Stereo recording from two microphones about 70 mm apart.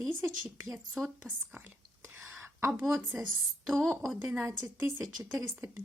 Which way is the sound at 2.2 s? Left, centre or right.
Right.